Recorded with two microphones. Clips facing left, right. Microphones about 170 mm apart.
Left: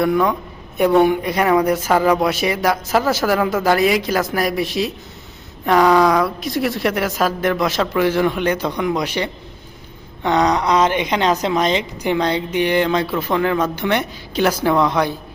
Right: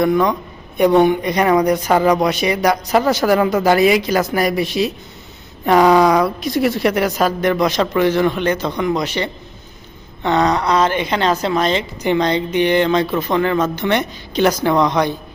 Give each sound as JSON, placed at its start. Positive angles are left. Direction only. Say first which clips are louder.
{"t": 0.0, "sound": "a woman's voice", "louder": "right 2 dB", "side_deg": 5}